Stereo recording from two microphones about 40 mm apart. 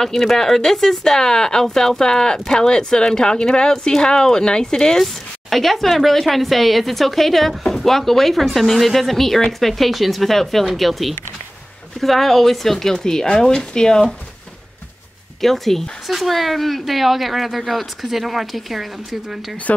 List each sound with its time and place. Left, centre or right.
0.0 s speech: centre
5.0 s a woman's voice: centre
15.4 s a woman's voice: centre